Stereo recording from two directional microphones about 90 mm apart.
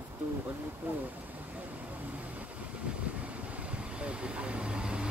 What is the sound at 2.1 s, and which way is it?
Vehicle, 15° right (ahead or behind).